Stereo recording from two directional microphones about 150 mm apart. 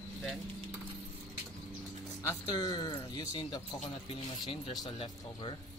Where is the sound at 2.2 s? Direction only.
30° left (ahead or behind).